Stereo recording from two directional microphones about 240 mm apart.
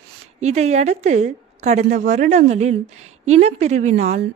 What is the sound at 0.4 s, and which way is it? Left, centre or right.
A woman's voice, right.